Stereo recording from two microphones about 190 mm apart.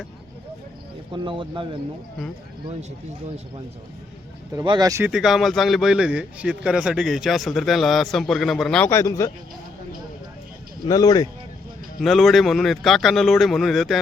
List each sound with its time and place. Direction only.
1.1 s speech: 25° right (ahead or behind)
4.5 s speech: 20° right (ahead or behind)
5.1 s a man's voice: centre (ahead or behind)
8.9 s a man's voice: 15° left (ahead or behind)
10.8 s speech: 20° left (ahead or behind)
12.0 s a man's voice: centre (ahead or behind)